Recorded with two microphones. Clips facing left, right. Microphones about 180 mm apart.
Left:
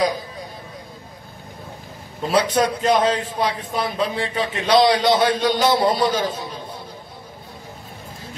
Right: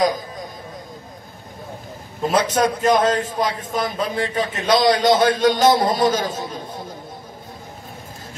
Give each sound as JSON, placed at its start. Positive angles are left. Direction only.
{"t": 2.2, "sound": "a man's voice", "side_deg": -45}